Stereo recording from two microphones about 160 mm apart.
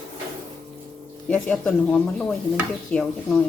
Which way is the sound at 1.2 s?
10° left (ahead or behind).